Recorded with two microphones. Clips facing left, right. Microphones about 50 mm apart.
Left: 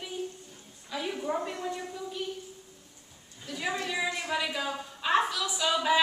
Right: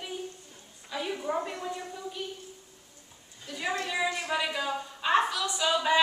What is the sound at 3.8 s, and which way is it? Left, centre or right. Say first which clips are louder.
A woman's voice: right 1 dB; centre.